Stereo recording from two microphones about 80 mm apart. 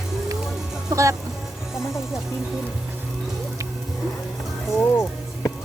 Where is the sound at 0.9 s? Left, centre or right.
Right.